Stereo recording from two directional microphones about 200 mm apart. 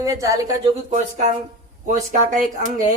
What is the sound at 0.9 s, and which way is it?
A woman's voice, 35° right (ahead or behind).